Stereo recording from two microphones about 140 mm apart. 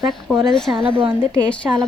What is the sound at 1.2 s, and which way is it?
Speech, 5° left (ahead or behind).